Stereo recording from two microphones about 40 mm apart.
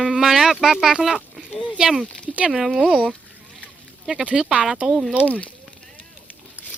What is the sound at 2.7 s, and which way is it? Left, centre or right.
Speech, centre.